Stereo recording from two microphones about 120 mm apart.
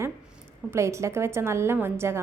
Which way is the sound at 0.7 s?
25° right (ahead or behind).